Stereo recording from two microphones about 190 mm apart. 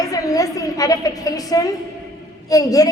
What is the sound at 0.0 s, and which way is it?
A woman's voice, 20° left (ahead or behind).